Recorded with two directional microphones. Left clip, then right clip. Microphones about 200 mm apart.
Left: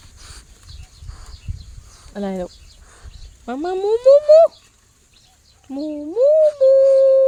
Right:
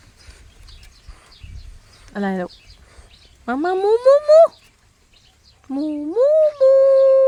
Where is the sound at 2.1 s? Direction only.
30° right (ahead or behind).